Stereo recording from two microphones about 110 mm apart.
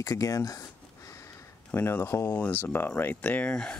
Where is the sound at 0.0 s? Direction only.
30° left (ahead or behind).